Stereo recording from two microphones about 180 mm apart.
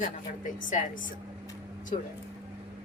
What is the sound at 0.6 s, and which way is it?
Speech, 45° left (ahead or behind).